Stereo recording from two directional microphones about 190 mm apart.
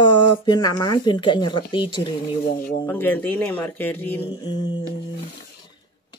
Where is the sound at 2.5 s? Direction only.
50° left (ahead or behind).